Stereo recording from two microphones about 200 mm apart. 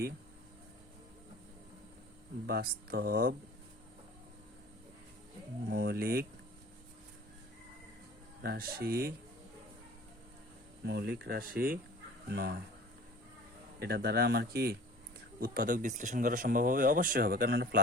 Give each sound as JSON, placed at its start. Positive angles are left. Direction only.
{"t": 2.5, "sound": "speech", "side_deg": -50}
{"t": 5.6, "sound": "speech", "side_deg": -50}
{"t": 8.4, "sound": "speech", "side_deg": -50}
{"t": 10.8, "sound": "speech", "side_deg": -55}
{"t": 13.7, "sound": "speech", "side_deg": -50}